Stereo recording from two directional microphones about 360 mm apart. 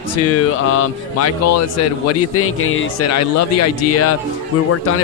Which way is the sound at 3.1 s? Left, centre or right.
Left.